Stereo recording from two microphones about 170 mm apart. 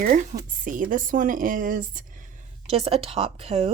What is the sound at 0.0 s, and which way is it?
Speech, 50° right (ahead or behind).